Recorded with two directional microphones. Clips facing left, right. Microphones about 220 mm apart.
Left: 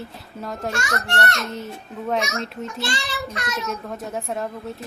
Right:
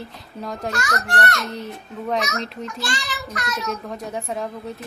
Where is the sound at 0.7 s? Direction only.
25° left (ahead or behind).